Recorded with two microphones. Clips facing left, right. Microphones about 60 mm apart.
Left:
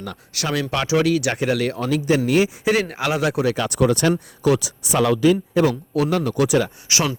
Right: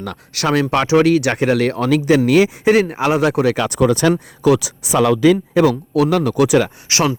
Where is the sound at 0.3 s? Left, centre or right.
Right.